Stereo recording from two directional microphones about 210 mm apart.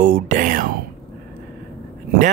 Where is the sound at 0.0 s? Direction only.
40° right (ahead or behind).